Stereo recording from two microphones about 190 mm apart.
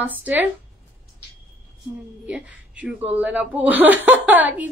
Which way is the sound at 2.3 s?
5° right (ahead or behind).